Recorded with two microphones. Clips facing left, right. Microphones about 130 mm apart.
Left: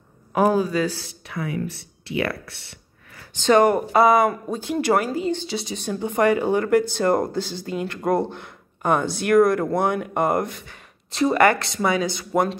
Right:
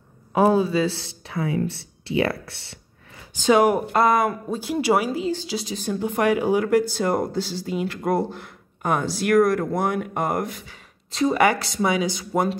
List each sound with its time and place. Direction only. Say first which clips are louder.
0.3 s speech: right 1 dB; 25° right (ahead or behind)
3.3 s speech: left 1 dB; 10° right (ahead or behind)
3.9 s speech: left 3 dB; 5° left (ahead or behind)